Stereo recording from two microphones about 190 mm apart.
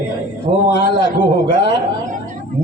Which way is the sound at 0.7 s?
65° left (ahead or behind).